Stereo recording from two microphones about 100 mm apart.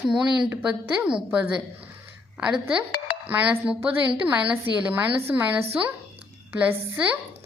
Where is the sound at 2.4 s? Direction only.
10° right (ahead or behind).